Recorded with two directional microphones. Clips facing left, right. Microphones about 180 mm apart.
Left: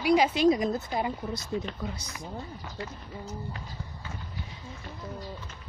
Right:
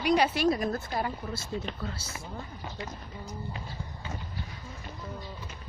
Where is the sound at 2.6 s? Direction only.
15° right (ahead or behind).